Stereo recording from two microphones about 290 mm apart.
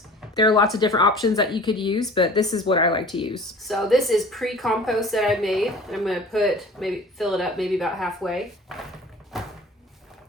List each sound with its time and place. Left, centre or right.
0.3 s a woman's voice: centre
3.3 s a woman's voice: centre
9.3 s cupboard open or close: centre